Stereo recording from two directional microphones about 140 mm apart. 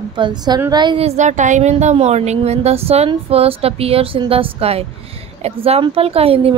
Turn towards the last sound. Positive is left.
turn(degrees=-45)  # may be behind; listen again after turning